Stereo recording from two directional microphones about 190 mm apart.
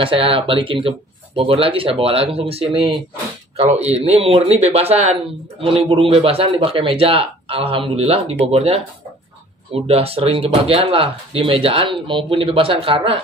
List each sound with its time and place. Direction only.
0.0 s speech: 30° right (ahead or behind)